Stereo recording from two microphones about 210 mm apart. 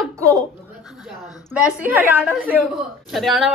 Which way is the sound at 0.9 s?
Centre (ahead or behind).